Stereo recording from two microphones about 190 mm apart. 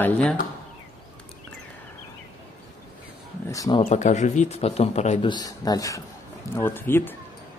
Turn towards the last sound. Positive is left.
turn(degrees=10)  # may be behind; listen again after turning